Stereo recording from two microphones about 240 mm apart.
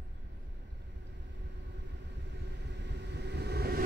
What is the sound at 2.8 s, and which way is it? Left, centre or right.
Vehicle, right.